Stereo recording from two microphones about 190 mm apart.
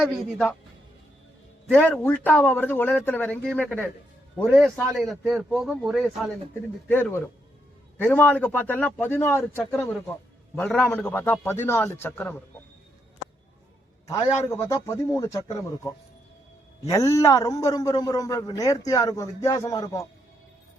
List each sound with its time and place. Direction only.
0.0 s speech: 10° left (ahead or behind)
1.7 s a man's voice: 10° left (ahead or behind)
6.8 s speech: 10° left (ahead or behind)
14.1 s speech: 15° left (ahead or behind)
16.9 s a man's voice: 15° left (ahead or behind)